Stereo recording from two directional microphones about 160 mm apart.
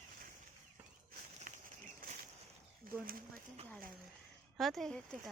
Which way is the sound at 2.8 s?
60° right (ahead or behind).